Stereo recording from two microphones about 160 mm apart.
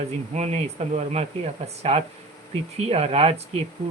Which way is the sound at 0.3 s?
45° right (ahead or behind).